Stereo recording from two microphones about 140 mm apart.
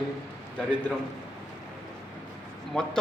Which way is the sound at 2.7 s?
5° left (ahead or behind).